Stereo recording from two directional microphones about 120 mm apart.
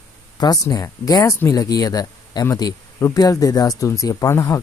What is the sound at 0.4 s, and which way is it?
Speech, 30° left (ahead or behind).